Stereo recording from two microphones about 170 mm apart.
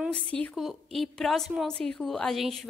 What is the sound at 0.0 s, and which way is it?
A woman's voice, 5° left (ahead or behind).